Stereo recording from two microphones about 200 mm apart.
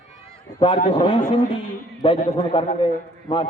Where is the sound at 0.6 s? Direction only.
25° left (ahead or behind).